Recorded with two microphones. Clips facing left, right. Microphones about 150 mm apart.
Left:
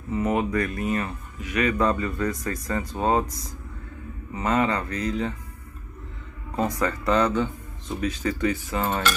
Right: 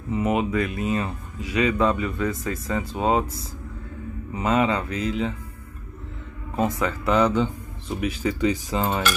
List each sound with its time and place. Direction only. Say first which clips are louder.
0.1 s speech: right 1 dB; 20° right (ahead or behind)
2.8 s speech: right 1 dB; 25° right (ahead or behind)
4.3 s speech: right 2 dB; 15° right (ahead or behind)
6.8 s speech: right 1 dB; 5° right (ahead or behind)